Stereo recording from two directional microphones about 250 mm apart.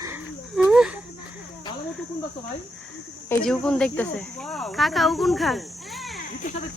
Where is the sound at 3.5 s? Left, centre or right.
Centre.